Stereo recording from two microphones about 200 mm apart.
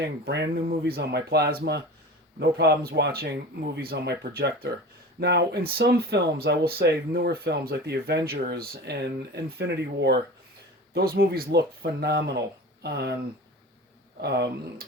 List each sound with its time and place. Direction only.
0.3 s speech: 60° right (ahead or behind)
14.2 s speech: 55° right (ahead or behind)